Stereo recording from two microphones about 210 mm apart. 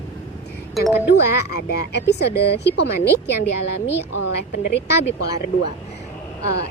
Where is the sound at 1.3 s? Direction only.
55° left (ahead or behind).